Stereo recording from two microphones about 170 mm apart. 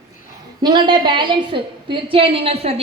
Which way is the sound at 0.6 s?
25° right (ahead or behind).